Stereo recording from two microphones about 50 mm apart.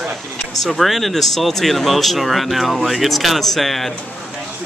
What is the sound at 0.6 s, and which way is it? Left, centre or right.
Speech, centre.